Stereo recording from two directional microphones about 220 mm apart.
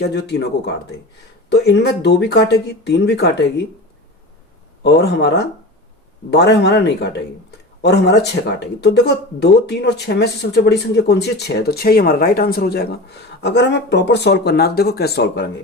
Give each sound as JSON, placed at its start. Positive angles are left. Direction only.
{"t": 0.0, "sound": "speech", "side_deg": 50}
{"t": 4.8, "sound": "speech", "side_deg": 50}